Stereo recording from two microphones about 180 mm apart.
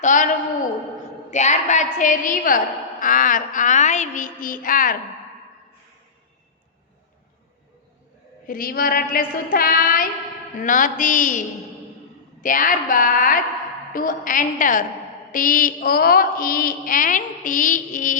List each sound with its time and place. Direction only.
0.0 s a woman's voice: 45° left (ahead or behind)
1.3 s a woman's voice: 40° left (ahead or behind)
8.4 s a woman's voice: 55° left (ahead or behind)